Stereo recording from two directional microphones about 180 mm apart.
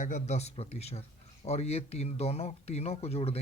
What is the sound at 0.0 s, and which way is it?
Speech, 40° left (ahead or behind).